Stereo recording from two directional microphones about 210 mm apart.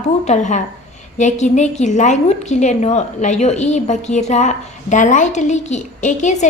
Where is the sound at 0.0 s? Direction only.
35° left (ahead or behind).